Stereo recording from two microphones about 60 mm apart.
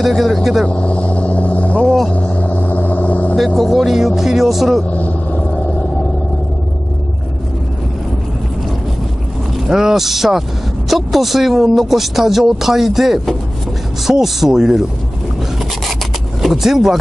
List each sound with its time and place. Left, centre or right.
0.0 s speech: centre
0.7 s vehicle: left
3.3 s speech: centre
4.9 s vehicle: left
9.7 s speech: centre
16.4 s speech: centre